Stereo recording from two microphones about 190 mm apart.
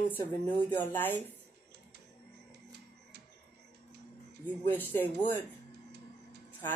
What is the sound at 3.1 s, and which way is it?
Music, 60° right (ahead or behind).